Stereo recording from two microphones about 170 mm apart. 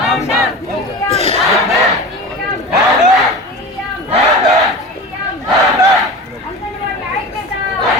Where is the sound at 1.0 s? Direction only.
35° left (ahead or behind).